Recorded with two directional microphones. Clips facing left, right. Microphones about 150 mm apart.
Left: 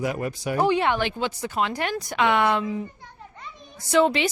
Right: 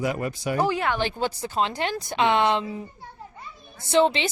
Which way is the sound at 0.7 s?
25° left (ahead or behind).